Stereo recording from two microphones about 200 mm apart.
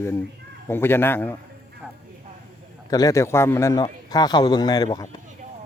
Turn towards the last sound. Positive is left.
turn(degrees=20)  # may be behind; listen again after turning